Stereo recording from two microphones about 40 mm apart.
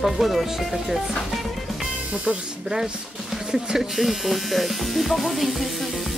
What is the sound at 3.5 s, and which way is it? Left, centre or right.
Speech, centre.